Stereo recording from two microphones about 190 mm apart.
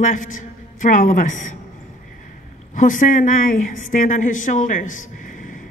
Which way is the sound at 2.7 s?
45° left (ahead or behind).